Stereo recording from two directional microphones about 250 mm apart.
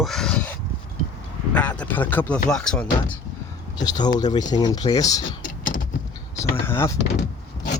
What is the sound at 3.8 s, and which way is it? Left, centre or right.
Speech, centre.